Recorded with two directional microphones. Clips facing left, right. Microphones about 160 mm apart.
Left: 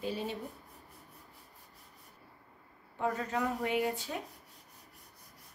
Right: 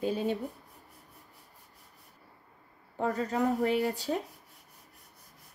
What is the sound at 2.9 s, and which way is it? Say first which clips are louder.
Speech: right 4 dB; 35° right (ahead or behind).